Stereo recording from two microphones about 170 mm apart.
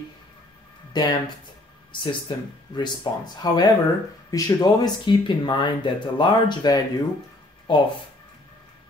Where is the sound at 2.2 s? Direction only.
25° left (ahead or behind).